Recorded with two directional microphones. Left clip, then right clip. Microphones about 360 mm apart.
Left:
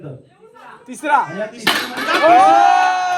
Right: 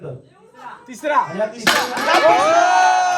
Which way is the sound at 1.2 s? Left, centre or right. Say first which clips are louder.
Right 3 dB; right.